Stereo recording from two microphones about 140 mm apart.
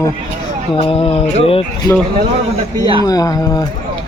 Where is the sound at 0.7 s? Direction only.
40° left (ahead or behind).